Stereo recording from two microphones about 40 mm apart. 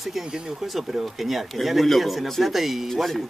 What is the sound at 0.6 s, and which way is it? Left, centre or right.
Speech, centre.